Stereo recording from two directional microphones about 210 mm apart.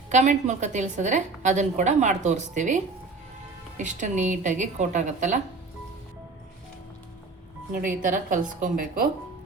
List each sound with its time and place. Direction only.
0.1 s a woman's voice: 35° right (ahead or behind)
7.7 s a woman's voice: 40° right (ahead or behind)